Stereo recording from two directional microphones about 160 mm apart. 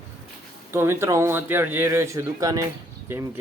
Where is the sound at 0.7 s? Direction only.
15° right (ahead or behind).